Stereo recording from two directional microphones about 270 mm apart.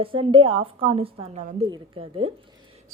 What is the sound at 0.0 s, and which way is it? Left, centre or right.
A woman's voice, centre.